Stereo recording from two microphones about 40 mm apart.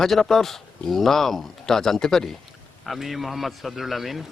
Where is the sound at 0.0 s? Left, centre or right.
Centre.